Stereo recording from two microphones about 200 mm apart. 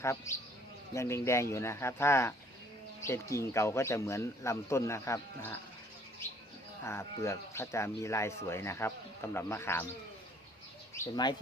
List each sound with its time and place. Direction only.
0.0 s speech: 15° left (ahead or behind)
6.8 s speech: 15° left (ahead or behind)
10.9 s speech: 15° left (ahead or behind)